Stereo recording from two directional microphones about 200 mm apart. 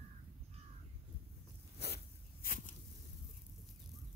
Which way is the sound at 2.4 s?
40° left (ahead or behind).